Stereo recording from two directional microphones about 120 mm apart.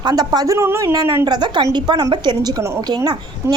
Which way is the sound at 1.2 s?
35° right (ahead or behind).